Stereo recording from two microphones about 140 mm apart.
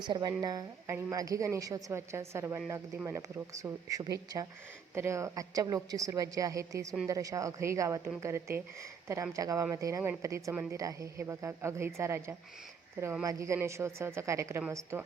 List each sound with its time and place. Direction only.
0.1 s a woman's voice: 30° right (ahead or behind)